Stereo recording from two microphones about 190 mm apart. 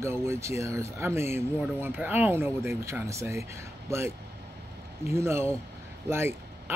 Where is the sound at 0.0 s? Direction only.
15° right (ahead or behind).